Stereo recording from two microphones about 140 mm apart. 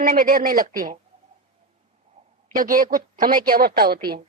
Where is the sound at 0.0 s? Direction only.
90° right.